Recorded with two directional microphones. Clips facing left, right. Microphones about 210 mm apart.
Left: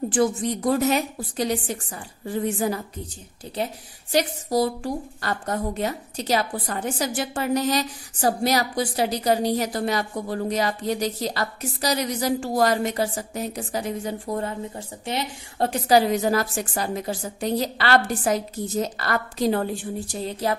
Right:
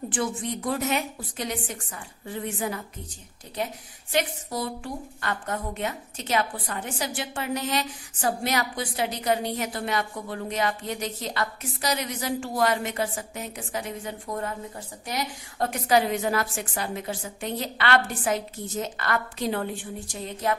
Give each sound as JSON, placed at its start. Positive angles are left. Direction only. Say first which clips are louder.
{"t": 0.1, "sound": "a woman's voice", "louder": "left 7 dB", "side_deg": 40}